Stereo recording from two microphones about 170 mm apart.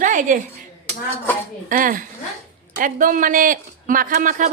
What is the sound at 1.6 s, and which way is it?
Speech, 50° right (ahead or behind).